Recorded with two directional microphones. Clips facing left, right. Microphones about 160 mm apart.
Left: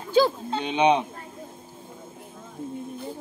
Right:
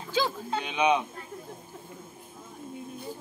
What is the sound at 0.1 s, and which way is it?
Speech, 35° left (ahead or behind).